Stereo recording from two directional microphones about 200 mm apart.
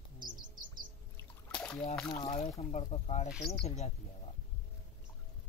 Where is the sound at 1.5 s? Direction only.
5° left (ahead or behind).